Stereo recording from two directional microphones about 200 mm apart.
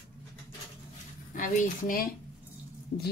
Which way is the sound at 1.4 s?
40° left (ahead or behind).